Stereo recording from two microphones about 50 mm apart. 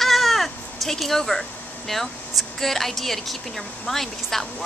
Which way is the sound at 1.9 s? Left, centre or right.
Centre.